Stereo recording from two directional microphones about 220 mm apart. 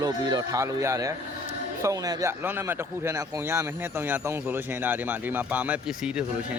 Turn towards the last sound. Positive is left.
turn(degrees=-5)  # may be behind; listen again after turning